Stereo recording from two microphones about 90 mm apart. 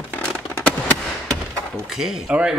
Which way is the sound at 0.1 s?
15° left (ahead or behind).